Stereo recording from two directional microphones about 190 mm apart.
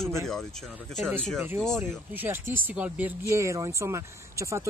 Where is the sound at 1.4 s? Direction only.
10° right (ahead or behind).